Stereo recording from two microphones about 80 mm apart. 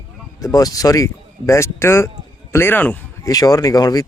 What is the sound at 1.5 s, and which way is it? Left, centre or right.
Speech, left.